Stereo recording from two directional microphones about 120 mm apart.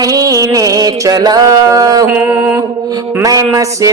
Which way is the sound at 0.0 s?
30° right (ahead or behind).